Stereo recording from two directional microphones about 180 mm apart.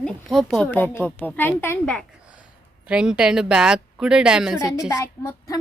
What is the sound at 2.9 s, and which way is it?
A woman's voice, 5° right (ahead or behind).